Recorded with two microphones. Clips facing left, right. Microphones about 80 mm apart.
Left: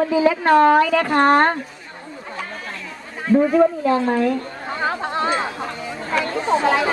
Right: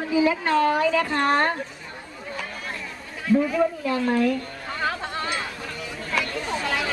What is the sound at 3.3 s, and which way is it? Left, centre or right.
Speech, left.